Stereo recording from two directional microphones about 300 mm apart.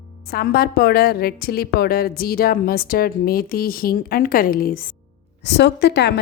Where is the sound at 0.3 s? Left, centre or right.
Left.